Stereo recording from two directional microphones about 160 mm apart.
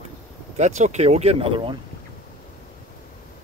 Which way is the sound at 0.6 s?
45° right (ahead or behind).